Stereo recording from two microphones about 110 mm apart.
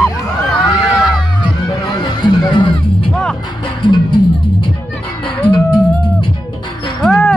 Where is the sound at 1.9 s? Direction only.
40° left (ahead or behind).